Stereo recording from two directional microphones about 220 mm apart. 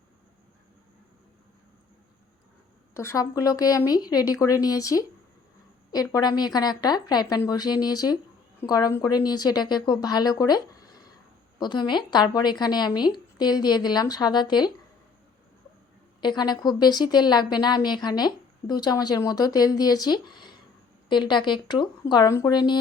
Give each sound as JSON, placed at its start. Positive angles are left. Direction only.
{"t": 2.9, "sound": "a woman's voice", "side_deg": 10}
{"t": 16.2, "sound": "a woman's voice", "side_deg": 20}